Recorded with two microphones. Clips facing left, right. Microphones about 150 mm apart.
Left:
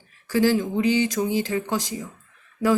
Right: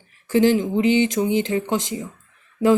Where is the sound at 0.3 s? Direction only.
25° right (ahead or behind).